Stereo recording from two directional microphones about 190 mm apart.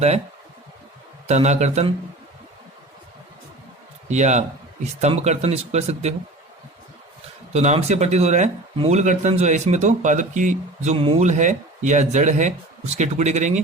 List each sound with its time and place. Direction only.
1.3 s speech: 35° right (ahead or behind)
4.1 s speech: 35° right (ahead or behind)
7.5 s speech: 35° right (ahead or behind)